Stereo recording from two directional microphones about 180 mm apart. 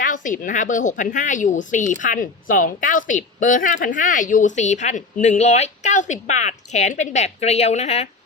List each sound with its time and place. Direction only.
0.0 s a woman's voice: 50° left (ahead or behind)